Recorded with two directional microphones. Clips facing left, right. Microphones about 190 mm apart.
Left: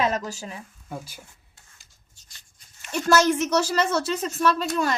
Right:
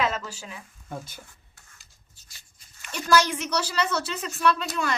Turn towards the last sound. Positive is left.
turn(degrees=40)  # may be behind; listen again after turning